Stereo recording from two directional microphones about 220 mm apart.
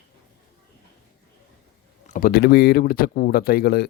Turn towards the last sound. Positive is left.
turn(degrees=45)  # may be behind; listen again after turning